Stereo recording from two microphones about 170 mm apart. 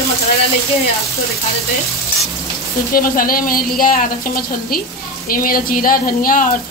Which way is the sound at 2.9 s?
55° left (ahead or behind).